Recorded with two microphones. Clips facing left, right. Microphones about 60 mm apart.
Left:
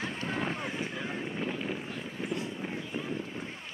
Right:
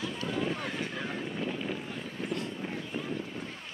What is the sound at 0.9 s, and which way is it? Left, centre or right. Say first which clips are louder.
Boat: even; centre.